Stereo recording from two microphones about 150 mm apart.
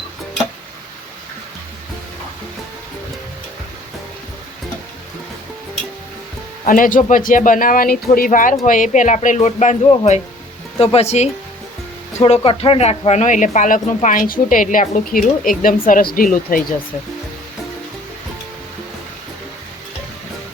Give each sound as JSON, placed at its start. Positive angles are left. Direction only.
{"t": 6.7, "sound": "speech", "side_deg": 65}